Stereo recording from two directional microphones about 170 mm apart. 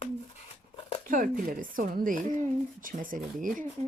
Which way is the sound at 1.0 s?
55° right (ahead or behind).